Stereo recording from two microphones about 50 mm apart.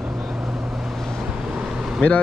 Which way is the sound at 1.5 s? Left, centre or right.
Centre.